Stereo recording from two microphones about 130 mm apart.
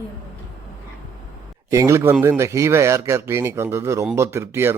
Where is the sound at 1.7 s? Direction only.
25° right (ahead or behind).